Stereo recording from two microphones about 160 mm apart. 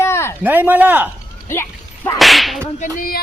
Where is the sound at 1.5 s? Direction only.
15° left (ahead or behind).